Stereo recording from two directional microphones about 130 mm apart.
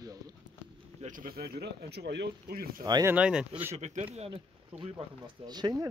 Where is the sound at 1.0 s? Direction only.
90° right.